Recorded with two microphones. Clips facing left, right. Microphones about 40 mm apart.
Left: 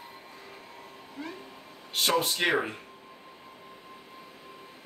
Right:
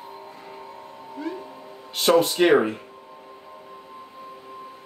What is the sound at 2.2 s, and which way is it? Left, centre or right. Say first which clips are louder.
Speech: right 9 dB; centre.